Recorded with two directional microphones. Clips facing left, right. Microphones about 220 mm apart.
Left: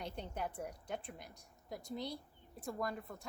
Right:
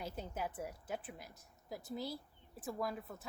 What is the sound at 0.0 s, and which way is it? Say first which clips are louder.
A woman's voice: even; 5° right (ahead or behind).